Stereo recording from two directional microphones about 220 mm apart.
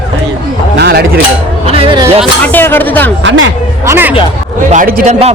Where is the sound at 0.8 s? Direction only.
45° right (ahead or behind).